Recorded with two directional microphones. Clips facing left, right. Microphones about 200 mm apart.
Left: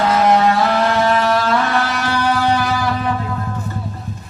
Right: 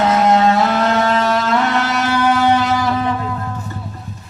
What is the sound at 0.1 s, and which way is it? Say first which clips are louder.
Vehicle: left 1 dB; 25° right (ahead or behind).